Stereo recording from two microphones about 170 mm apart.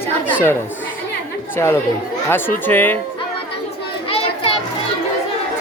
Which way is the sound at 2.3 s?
10° left (ahead or behind).